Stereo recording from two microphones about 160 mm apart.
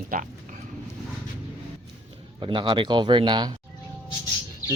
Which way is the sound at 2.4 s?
30° right (ahead or behind).